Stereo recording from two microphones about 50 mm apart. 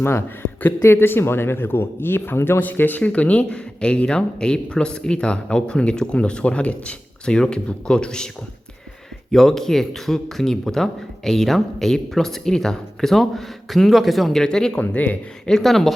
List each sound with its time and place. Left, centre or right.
0.0 s a man's voice: left
2.6 s speech: left
3.0 s a man's voice: left
9.3 s a man's voice: centre
14.4 s a man's voice: centre
14.8 s speech: left
15.6 s speech: centre